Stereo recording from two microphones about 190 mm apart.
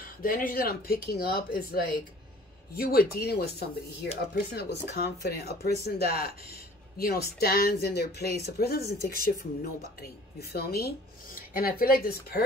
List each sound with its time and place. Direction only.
0.0 s speech: 45° left (ahead or behind)